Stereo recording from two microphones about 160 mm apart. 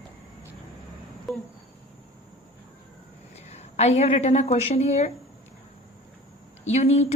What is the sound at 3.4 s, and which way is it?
A woman's voice, 40° left (ahead or behind).